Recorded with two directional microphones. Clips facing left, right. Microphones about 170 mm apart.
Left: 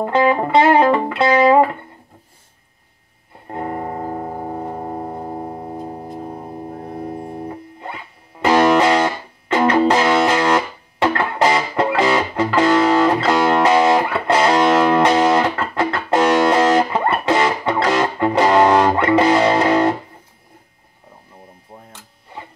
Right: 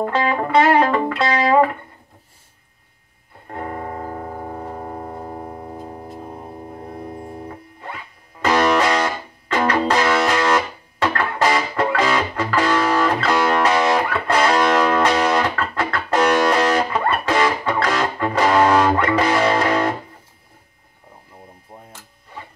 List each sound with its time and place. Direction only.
0.0 s music: 20° left (ahead or behind)
3.4 s music: 20° left (ahead or behind)
7.2 s music: 20° left (ahead or behind)